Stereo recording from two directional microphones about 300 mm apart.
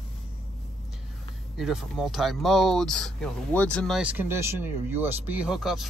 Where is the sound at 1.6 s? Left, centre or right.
Centre.